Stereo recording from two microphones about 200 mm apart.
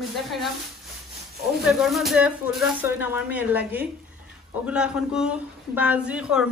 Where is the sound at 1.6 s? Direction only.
Centre (ahead or behind).